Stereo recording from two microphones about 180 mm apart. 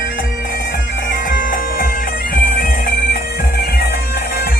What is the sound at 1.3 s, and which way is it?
Bagpipes, 50° left (ahead or behind).